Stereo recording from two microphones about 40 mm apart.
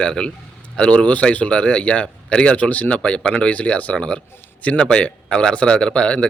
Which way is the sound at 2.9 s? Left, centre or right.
Left.